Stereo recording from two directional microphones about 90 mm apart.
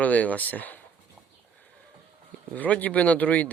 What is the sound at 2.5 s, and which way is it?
Speech, 15° left (ahead or behind).